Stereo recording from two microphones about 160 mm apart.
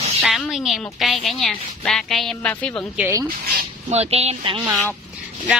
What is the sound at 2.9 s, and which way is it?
Speech, 10° right (ahead or behind).